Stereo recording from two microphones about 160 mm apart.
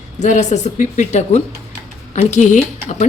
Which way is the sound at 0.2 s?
45° left (ahead or behind).